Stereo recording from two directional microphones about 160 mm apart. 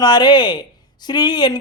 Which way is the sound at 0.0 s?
25° left (ahead or behind).